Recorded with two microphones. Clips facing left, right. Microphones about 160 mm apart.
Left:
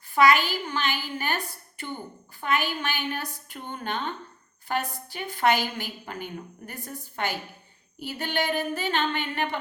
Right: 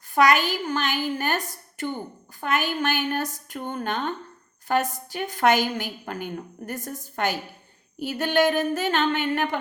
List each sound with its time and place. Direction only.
0.1 s a woman's voice: 45° right (ahead or behind)